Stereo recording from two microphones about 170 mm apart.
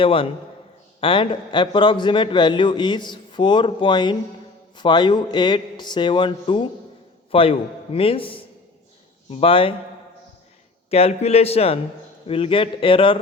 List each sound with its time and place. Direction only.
0.0 s a man's voice: 30° left (ahead or behind)
10.9 s speech: 35° left (ahead or behind)